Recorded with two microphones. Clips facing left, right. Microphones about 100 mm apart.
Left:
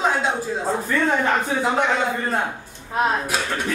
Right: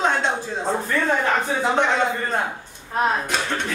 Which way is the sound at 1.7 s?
5° left (ahead or behind).